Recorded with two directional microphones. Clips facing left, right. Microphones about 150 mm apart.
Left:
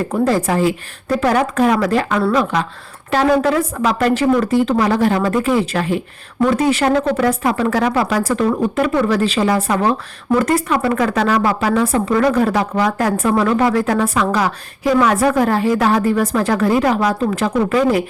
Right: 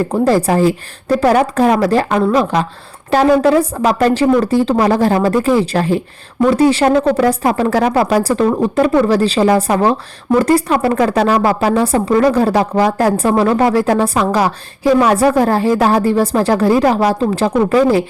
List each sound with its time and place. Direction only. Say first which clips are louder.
0.1 s speech: right 2 dB; 35° right (ahead or behind)